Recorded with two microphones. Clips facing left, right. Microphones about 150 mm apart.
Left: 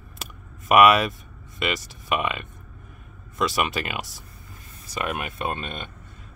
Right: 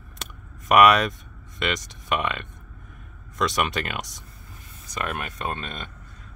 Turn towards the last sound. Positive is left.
turn(degrees=10)  # may be behind; listen again after turning